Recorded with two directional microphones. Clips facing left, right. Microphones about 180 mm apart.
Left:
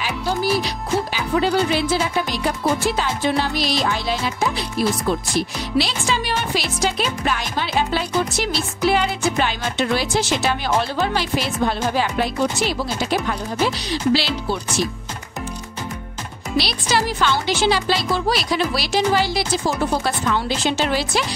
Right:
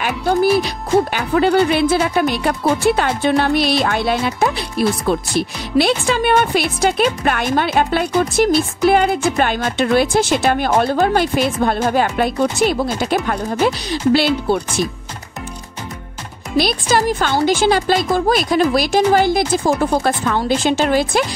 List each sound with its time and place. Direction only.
0.0 s music: 55° right (ahead or behind)
1.1 s speech: 60° right (ahead or behind)
16.5 s speech: 50° right (ahead or behind)